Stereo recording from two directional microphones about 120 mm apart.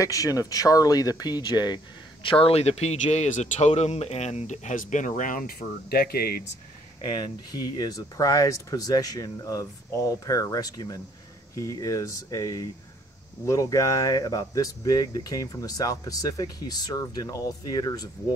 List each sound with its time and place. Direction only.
0.0 s speech: 30° left (ahead or behind)
2.2 s speech: 50° left (ahead or behind); by 5.3 s 90° left
7.6 s speech: 30° left (ahead or behind)